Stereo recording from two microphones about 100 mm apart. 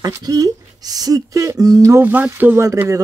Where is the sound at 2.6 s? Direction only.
35° right (ahead or behind).